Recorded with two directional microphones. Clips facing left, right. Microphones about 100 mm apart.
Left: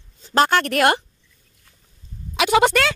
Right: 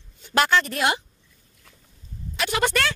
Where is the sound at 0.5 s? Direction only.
60° left (ahead or behind).